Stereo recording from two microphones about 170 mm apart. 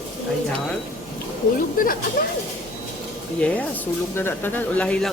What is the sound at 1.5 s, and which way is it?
Speech, 55° left (ahead or behind).